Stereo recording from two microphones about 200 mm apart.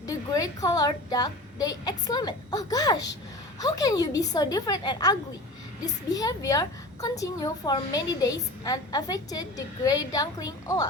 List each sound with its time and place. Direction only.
0.0 s a woman's voice: 20° left (ahead or behind)